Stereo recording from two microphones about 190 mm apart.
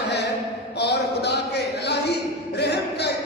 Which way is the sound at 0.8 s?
60° left (ahead or behind).